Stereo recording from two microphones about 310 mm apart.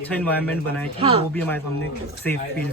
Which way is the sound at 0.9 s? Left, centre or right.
Centre.